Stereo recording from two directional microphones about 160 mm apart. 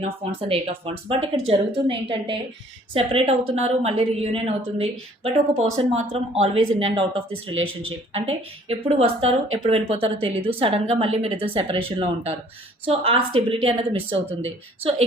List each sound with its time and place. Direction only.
0.4 s a woman's voice: 35° right (ahead or behind)